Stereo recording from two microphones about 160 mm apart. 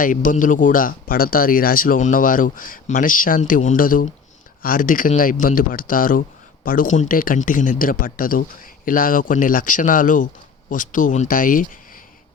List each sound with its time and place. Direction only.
0.0 s speech: 55° left (ahead or behind)